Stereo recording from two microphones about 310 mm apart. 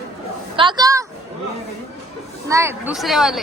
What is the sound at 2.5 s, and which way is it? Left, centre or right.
Speech, centre.